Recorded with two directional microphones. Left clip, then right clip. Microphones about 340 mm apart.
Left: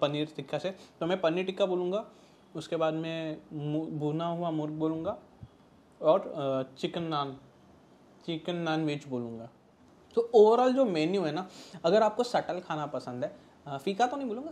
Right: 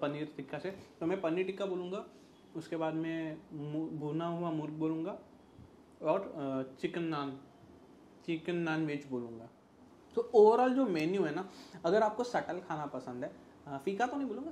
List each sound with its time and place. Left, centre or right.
0.0 s speech: left
6.0 s speech: left
8.3 s speech: left